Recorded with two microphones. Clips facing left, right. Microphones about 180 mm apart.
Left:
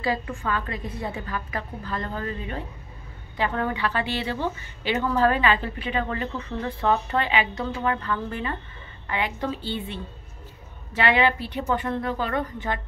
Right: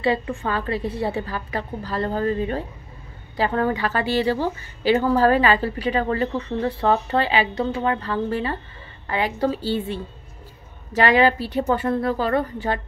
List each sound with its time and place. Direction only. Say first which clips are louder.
0.0 s a woman's voice: right 5 dB; 30° right (ahead or behind)
11.0 s a woman's voice: right 4 dB; 40° right (ahead or behind)